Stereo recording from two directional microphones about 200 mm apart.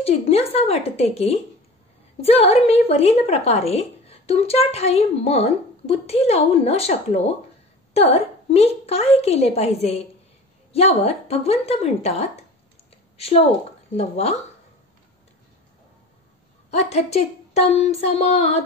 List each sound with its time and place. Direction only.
0.0 s a woman's voice: 30° left (ahead or behind)
13.9 s a woman's voice: 30° left (ahead or behind)
16.7 s a woman's voice: 30° left (ahead or behind)